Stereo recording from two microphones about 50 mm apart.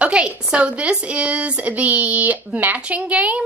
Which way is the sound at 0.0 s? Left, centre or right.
Right.